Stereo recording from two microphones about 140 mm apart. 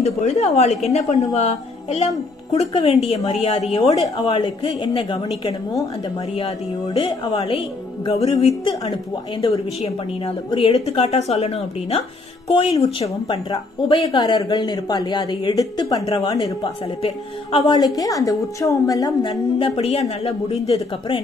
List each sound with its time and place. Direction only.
0.0 s a woman's voice: 50° left (ahead or behind); by 5.2 s 35° left (ahead or behind)
5.4 s a man's voice: 25° left (ahead or behind)
6.3 s a woman's voice: 40° left (ahead or behind); by 19.3 s 25° left (ahead or behind)
19.6 s a woman's voice: 45° left (ahead or behind)